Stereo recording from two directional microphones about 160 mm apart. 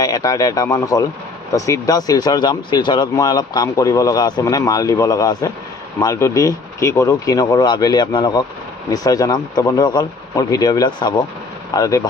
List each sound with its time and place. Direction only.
0.0 s speech: 20° left (ahead or behind)